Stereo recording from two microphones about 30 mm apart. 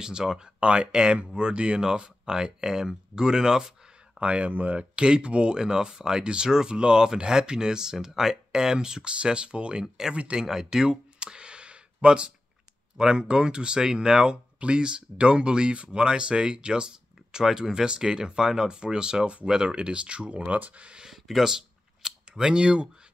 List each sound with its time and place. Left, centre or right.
0.0 s speech: right
0.6 s speech: right
4.2 s speech: right
4.5 s speech: right
4.7 s speech: right
5.6 s speech: right
8.5 s speech: right
10.3 s a sound: centre
12.9 s speech: right
19.7 s speech: right
21.1 s a sound: centre
22.3 s speech: right